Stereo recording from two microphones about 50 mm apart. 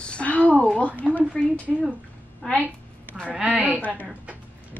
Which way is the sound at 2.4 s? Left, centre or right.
Centre.